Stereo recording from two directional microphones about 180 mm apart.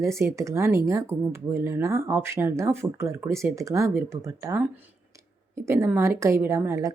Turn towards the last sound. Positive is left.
turn(degrees=-15)  # may be behind; listen again after turning